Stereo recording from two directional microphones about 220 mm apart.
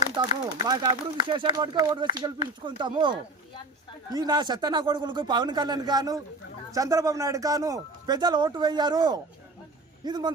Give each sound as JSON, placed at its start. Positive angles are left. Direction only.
{"t": 0.2, "sound": "speech", "side_deg": -15}